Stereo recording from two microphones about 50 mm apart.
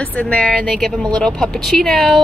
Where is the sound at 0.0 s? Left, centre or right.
Left.